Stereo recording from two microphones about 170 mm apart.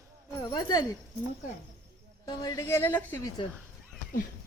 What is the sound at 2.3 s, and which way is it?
Speech, 25° left (ahead or behind).